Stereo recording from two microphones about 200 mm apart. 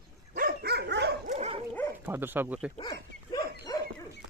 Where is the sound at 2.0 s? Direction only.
10° right (ahead or behind).